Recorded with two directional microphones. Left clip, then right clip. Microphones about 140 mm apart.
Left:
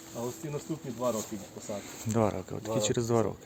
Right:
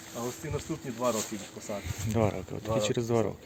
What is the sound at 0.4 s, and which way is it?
Speech, 20° left (ahead or behind).